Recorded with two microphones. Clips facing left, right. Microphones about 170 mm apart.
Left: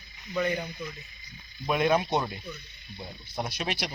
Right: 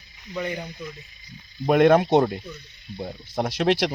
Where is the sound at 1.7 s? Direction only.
65° right (ahead or behind).